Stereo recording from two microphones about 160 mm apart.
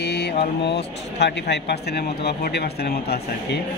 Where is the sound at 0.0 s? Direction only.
90° left.